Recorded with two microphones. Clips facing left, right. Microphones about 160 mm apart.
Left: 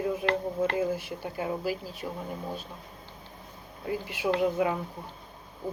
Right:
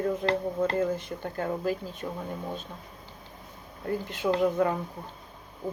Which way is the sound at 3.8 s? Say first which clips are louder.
Right 1 dB; 10° left (ahead or behind).